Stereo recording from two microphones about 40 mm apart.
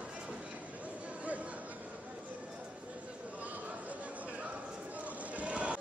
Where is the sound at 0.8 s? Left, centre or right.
Right.